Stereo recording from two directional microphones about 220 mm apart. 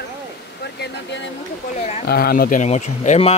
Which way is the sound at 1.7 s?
35° left (ahead or behind).